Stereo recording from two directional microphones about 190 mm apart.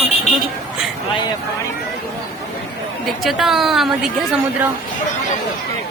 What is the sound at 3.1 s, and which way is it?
A woman's voice, centre (ahead or behind).